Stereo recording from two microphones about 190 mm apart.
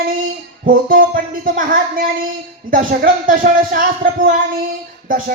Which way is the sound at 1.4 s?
45° right (ahead or behind).